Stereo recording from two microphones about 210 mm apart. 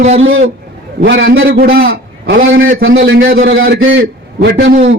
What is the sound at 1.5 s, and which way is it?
Speech, 45° right (ahead or behind).